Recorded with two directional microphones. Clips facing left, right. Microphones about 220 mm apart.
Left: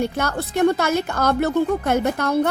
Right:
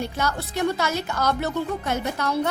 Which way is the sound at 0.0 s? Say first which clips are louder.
Left 4 dB; 55° left (ahead or behind).